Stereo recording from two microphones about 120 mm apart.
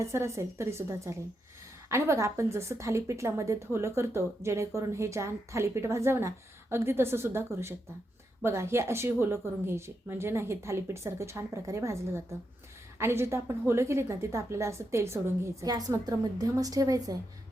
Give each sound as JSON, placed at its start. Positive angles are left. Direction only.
{"t": 0.0, "sound": "a woman's voice", "side_deg": -25}